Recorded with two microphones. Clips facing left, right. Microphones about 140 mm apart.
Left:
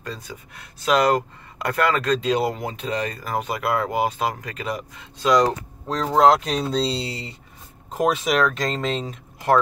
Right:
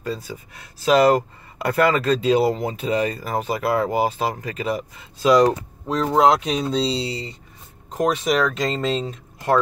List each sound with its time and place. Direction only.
0.0 s speech: 5° right (ahead or behind)